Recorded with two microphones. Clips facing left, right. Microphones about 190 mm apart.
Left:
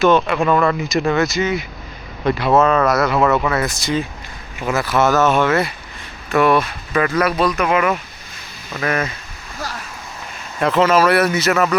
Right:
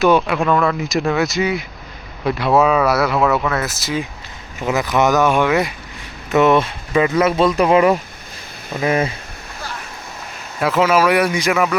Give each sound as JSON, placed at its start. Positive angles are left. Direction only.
{"t": 0.0, "sound": "speech", "side_deg": -5}
{"t": 4.6, "sound": "speech", "side_deg": -20}
{"t": 8.7, "sound": "speech", "side_deg": -20}
{"t": 10.6, "sound": "speech", "side_deg": -5}